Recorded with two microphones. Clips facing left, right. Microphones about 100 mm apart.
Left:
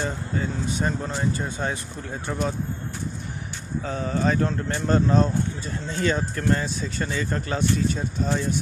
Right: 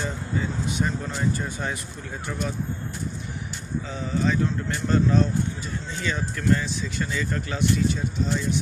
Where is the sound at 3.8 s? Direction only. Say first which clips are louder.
Left 2 dB; 45° left (ahead or behind).